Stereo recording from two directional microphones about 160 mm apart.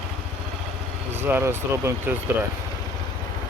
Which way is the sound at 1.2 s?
15° right (ahead or behind).